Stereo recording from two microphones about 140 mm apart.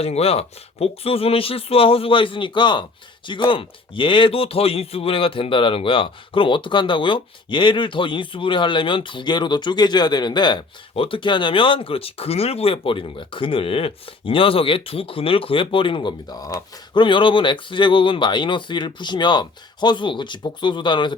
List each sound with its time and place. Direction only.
0.0 s speech: 45° left (ahead or behind); by 17.0 s 25° left (ahead or behind)
17.0 s speech: 35° left (ahead or behind)